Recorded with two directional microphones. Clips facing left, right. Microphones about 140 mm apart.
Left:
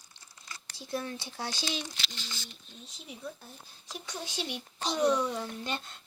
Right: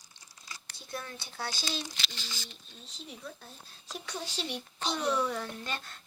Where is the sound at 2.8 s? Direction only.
15° left (ahead or behind).